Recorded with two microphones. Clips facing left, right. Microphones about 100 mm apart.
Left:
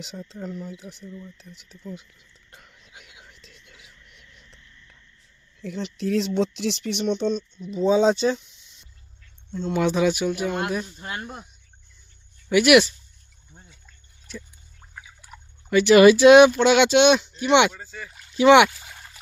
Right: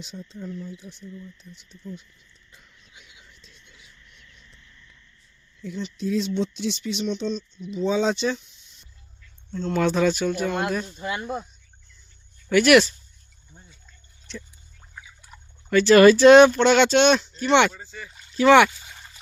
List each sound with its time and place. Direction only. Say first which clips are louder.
0.0 s speech: left 2 dB; 75° left (ahead or behind)
0.6 s speech: left 1 dB; 90° left
1.4 s a sound: left 1 dB; 70° left (ahead or behind)
5.6 s speech: left 1 dB; 70° left (ahead or behind); by 7.4 s 55° left (ahead or behind)
7.6 s speech: left 4 dB; 40° left (ahead or behind)
9.5 s speech: even; 15° left (ahead or behind)
12.5 s speech: even; 10° left (ahead or behind)
13.5 s a sound: even; 25° left (ahead or behind)
14.3 s speech: even; 5° left (ahead or behind)
18.3 s a sound: left 1 dB; 15° left (ahead or behind)